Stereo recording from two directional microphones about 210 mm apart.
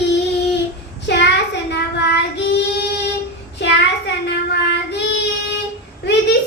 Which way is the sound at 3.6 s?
55° left (ahead or behind).